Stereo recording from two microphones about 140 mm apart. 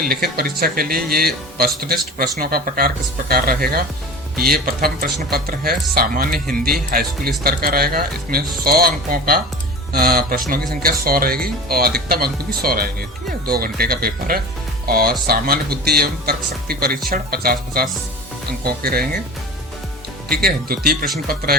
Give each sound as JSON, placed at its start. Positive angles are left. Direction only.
{"t": 0.0, "sound": "speech", "side_deg": -90}
{"t": 20.3, "sound": "speech", "side_deg": -90}